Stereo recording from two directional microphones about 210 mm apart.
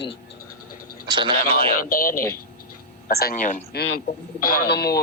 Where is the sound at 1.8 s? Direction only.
40° left (ahead or behind).